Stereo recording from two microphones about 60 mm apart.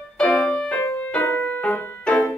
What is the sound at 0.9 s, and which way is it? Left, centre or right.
Music, left.